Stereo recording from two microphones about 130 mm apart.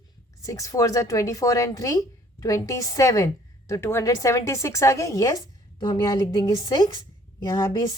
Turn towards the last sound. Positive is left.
turn(degrees=35)  # may be behind; listen again after turning